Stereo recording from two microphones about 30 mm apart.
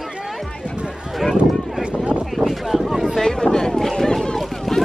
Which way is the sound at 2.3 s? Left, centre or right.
Centre.